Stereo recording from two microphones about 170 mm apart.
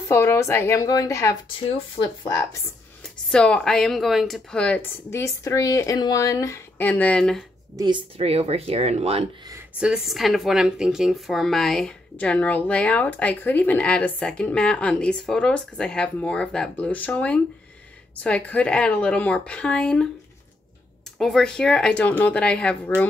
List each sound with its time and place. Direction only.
0.1 s speech: 15° left (ahead or behind)
3.3 s speech: 5° left (ahead or behind)
7.7 s a woman's voice: 25° right (ahead or behind)
8.2 s speech: 35° right (ahead or behind)
9.8 s speech: 5° right (ahead or behind)
21.2 s speech: centre (ahead or behind)